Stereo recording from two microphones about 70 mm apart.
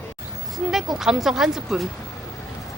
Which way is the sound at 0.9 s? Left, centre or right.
Centre.